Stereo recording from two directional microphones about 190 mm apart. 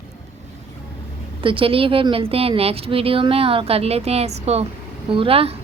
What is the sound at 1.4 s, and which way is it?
A woman's voice, 25° right (ahead or behind).